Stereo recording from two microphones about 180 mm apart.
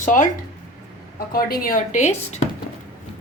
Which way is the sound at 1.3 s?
55° left (ahead or behind).